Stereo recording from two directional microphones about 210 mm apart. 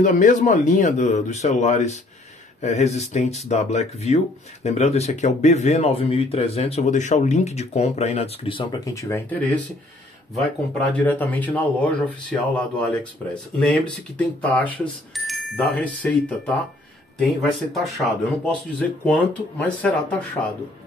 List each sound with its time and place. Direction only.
0.0 s speech: 35° left (ahead or behind); by 9.4 s 15° left (ahead or behind)
10.8 s speech: 5° left (ahead or behind)